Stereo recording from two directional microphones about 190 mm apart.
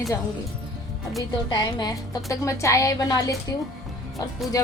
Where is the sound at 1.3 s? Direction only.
25° left (ahead or behind).